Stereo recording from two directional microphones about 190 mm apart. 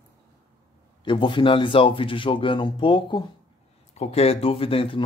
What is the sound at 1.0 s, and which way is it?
Speech, 25° left (ahead or behind).